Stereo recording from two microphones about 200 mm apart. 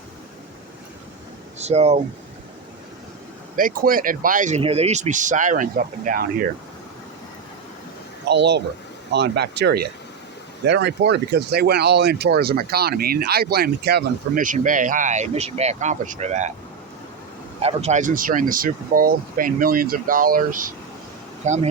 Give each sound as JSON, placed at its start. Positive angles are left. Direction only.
{"t": 1.5, "sound": "speech", "side_deg": -35}
{"t": 3.5, "sound": "speech", "side_deg": -45}
{"t": 8.3, "sound": "speech", "side_deg": -60}
{"t": 17.6, "sound": "speech", "side_deg": -30}